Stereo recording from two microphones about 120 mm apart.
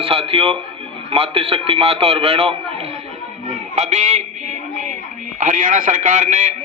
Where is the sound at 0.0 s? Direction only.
50° right (ahead or behind).